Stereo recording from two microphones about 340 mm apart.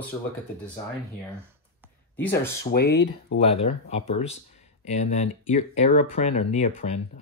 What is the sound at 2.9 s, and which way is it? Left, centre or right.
Speech, left.